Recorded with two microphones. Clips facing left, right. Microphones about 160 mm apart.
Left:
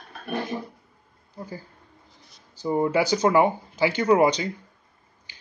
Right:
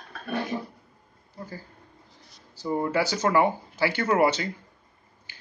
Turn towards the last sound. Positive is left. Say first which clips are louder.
# left 3 dB
turn(degrees=15)  # may be behind; listen again after turning